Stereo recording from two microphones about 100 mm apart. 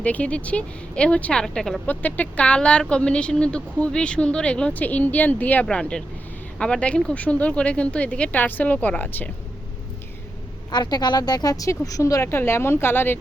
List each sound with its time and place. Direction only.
0.0 s speech: 15° left (ahead or behind)
1.9 s speech: 15° left (ahead or behind)
10.7 s speech: 45° left (ahead or behind); by 13.1 s 20° left (ahead or behind)